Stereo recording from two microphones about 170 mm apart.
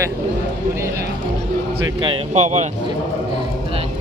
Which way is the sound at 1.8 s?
30° right (ahead or behind).